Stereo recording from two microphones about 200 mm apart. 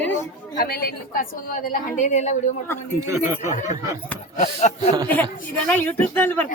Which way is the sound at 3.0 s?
15° right (ahead or behind).